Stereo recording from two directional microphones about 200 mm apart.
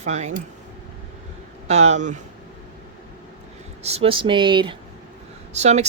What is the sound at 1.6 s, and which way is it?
Speech, 35° right (ahead or behind).